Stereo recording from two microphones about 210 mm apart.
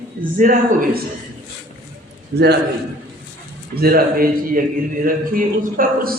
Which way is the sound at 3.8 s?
45° right (ahead or behind).